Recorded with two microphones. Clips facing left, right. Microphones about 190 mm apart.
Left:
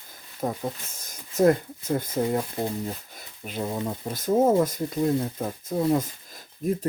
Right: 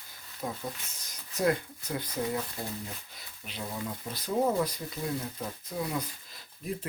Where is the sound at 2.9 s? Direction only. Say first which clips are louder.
Left 10 dB; 50° left (ahead or behind).